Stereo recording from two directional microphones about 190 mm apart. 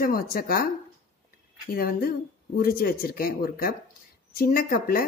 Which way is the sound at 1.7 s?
50° left (ahead or behind).